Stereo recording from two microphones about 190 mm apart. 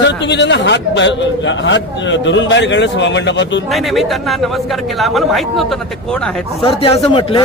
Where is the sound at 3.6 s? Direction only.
Centre (ahead or behind).